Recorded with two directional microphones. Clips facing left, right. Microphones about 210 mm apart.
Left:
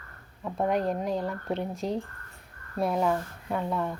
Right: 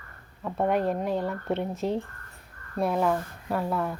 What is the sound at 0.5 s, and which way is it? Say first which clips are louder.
Speech: right 2 dB; centre (ahead or behind).